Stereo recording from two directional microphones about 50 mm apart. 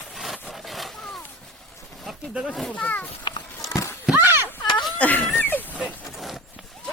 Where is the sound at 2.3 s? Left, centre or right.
Centre.